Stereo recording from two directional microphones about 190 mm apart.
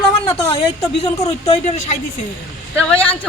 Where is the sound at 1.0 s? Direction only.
35° left (ahead or behind).